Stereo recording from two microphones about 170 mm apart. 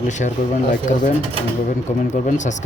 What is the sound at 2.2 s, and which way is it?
Speech, 45° left (ahead or behind).